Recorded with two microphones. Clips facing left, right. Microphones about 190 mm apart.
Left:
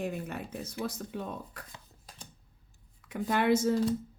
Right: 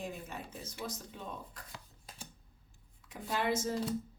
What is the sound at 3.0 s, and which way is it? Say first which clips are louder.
Speech: left 7 dB; 60° left (ahead or behind).